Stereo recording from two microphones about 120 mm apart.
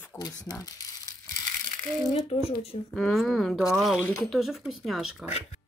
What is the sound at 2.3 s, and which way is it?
Speech, 50° left (ahead or behind).